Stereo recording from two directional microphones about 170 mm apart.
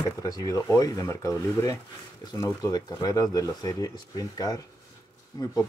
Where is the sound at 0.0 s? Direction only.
20° left (ahead or behind).